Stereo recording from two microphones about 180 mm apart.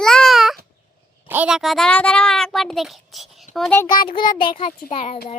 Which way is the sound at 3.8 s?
25° left (ahead or behind).